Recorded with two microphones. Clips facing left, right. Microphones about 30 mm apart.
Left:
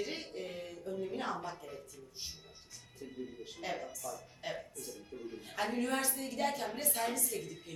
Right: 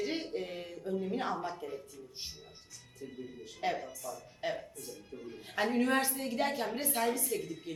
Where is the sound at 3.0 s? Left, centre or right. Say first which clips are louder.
Even; centre.